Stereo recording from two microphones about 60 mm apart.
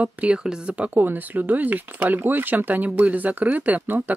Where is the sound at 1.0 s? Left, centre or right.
Right.